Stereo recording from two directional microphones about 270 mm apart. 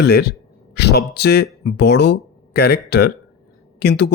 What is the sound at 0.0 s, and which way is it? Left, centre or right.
Speech, left.